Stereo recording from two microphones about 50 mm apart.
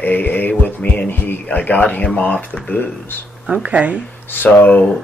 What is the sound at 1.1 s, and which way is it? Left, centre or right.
Speech, left.